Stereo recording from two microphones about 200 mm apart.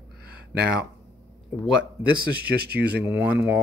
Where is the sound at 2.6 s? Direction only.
55° right (ahead or behind).